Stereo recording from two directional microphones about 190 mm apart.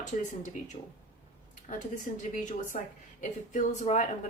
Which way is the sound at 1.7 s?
40° left (ahead or behind).